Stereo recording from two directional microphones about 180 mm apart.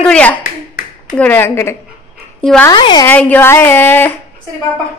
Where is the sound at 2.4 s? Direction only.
5° left (ahead or behind).